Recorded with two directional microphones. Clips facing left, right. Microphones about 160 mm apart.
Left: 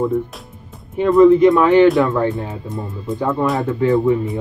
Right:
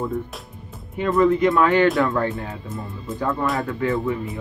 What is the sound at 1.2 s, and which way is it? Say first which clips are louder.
Speech: left 7 dB; 20° left (ahead or behind).